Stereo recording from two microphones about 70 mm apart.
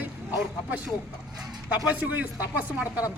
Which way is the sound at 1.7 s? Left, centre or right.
Right.